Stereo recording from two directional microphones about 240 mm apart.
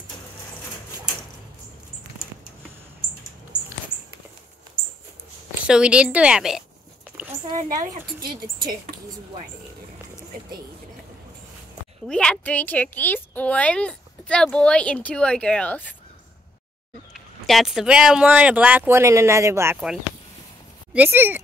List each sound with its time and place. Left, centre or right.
5.5 s a woman's voice: centre
8.4 s speech: right
12.1 s a woman's voice: centre
17.1 s a woman's voice: centre